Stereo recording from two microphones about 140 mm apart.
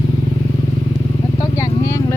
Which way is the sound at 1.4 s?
25° left (ahead or behind).